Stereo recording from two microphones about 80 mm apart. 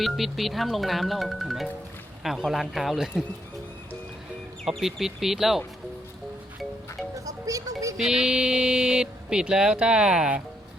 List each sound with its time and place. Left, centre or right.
0.0 s speech: centre
4.6 s speech: centre
7.3 s music: right
7.9 s speech: centre